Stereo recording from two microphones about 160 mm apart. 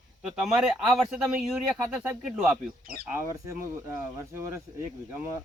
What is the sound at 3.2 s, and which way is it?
Speech, 20° right (ahead or behind).